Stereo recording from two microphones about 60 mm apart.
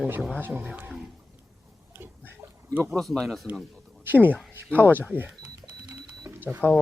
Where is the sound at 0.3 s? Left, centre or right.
Right.